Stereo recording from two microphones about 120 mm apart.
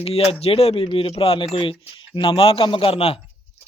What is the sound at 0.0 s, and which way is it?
A man's voice, 55° left (ahead or behind).